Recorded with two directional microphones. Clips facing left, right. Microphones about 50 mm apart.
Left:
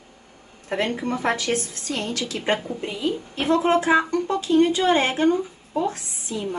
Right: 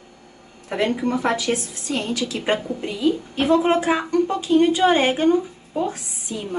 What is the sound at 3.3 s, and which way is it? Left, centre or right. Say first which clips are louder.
A woman's voice: even; centre.